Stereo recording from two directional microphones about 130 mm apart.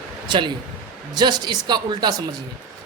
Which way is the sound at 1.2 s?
35° right (ahead or behind).